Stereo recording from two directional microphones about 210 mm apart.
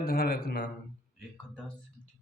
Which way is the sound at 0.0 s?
45° left (ahead or behind).